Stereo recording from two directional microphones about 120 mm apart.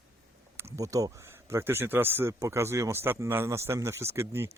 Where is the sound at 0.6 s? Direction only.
25° right (ahead or behind).